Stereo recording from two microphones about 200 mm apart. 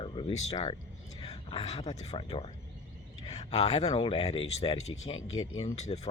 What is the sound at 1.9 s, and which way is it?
Speech, 35° left (ahead or behind).